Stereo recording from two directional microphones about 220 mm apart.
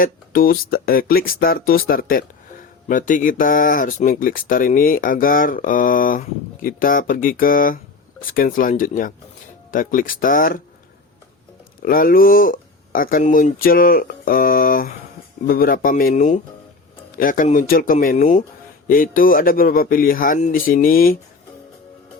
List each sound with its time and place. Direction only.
0.0 s speech: 40° left (ahead or behind)
11.8 s speech: 40° left (ahead or behind)